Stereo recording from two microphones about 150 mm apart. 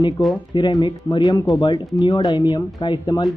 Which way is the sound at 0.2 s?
30° left (ahead or behind).